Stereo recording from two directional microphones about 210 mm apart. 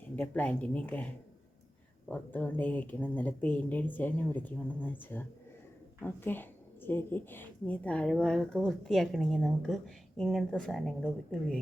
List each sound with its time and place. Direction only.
0.2 s speech: 5° left (ahead or behind)
2.0 s speech: 5° left (ahead or behind)